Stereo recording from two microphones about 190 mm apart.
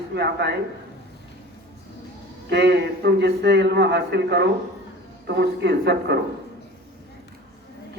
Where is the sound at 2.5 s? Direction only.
65° right (ahead or behind).